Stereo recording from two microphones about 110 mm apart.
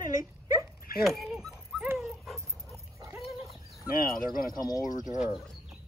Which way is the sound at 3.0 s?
30° right (ahead or behind).